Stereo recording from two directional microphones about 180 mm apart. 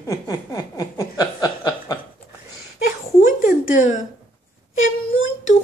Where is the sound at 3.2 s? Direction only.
50° left (ahead or behind).